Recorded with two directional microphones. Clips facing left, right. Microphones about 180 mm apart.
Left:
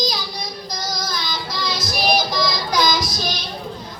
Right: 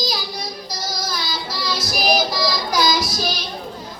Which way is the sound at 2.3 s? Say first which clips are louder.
Even; 5° right (ahead or behind).